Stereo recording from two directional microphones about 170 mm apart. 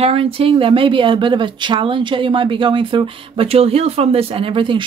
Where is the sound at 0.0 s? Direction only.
35° right (ahead or behind).